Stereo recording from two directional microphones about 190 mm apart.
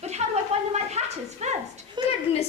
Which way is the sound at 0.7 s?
35° right (ahead or behind).